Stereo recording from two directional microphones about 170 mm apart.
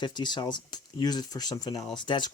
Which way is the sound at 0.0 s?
25° left (ahead or behind).